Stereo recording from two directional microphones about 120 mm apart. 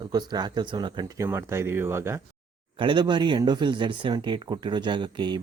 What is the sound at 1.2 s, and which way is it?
Speech, 20° right (ahead or behind).